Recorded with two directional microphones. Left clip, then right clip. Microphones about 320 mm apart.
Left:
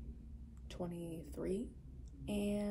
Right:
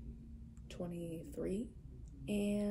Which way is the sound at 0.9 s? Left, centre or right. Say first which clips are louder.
Right 2 dB; left.